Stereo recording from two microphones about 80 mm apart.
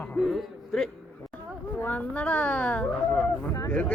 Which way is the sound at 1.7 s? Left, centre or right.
Centre.